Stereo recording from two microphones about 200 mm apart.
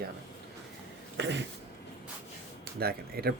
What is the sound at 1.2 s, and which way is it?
Speech, 60° right (ahead or behind).